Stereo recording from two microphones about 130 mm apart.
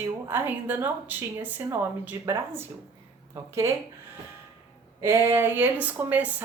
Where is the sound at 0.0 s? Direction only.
15° right (ahead or behind).